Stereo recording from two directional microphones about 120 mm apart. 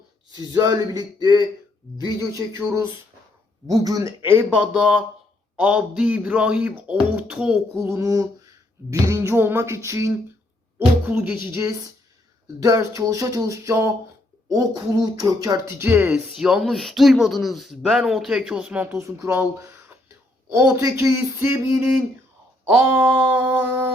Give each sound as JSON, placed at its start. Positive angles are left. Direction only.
{"t": 0.5, "sound": "speech", "side_deg": -30}
{"t": 7.9, "sound": "a sound", "side_deg": -25}
{"t": 11.1, "sound": "speech", "side_deg": -10}
{"t": 11.3, "sound": "speech", "side_deg": -20}
{"t": 16.3, "sound": "speech", "side_deg": -5}
{"t": 18.9, "sound": "a sound", "side_deg": -25}
{"t": 20.7, "sound": "speech", "side_deg": -25}
{"t": 23.0, "sound": "speech", "side_deg": -15}